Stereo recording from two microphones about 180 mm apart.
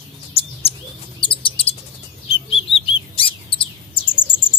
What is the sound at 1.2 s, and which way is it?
Bird, 30° left (ahead or behind).